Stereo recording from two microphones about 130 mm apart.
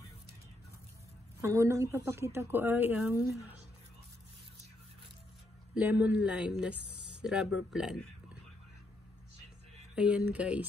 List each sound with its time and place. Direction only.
1.4 s speech: 20° right (ahead or behind)
5.8 s speech: 10° right (ahead or behind)
9.9 s speech: 10° right (ahead or behind)